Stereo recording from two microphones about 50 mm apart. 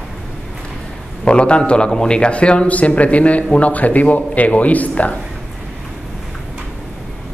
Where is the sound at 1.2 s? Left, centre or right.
Left.